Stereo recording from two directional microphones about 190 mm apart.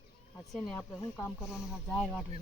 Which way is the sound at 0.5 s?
5° left (ahead or behind).